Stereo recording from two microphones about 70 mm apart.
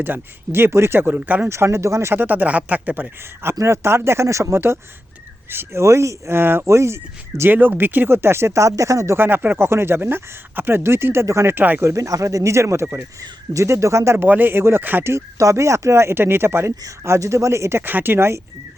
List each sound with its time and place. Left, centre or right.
0.0 s speech: right
1.5 s speech: right
3.6 s speech: right
9.1 s speech: right
11.5 s speech: right
11.8 s speech: right
14.3 s speech: right